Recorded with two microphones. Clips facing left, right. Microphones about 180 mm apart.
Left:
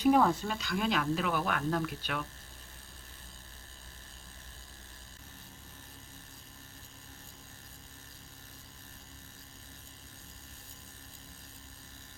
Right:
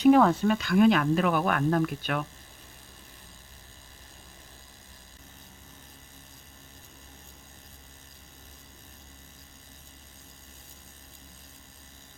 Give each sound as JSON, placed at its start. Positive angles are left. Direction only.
{"t": 0.0, "sound": "speech", "side_deg": -75}